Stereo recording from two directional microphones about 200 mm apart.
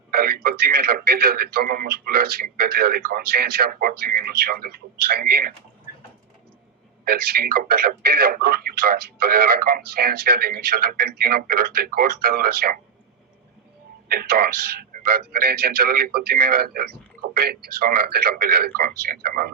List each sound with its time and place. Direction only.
0.1 s speech: 50° right (ahead or behind)
7.0 s speech: 50° right (ahead or behind)
14.1 s speech: 50° right (ahead or behind)